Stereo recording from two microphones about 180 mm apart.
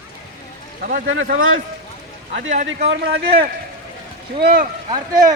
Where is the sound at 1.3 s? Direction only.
90° right.